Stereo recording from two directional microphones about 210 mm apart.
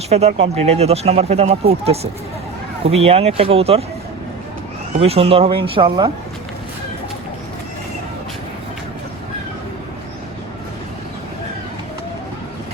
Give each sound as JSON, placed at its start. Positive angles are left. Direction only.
{"t": 0.1, "sound": "speech", "side_deg": -30}
{"t": 4.9, "sound": "speech", "side_deg": -30}